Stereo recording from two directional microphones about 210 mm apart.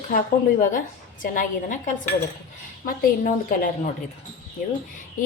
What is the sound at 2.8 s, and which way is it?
Speech, 40° left (ahead or behind).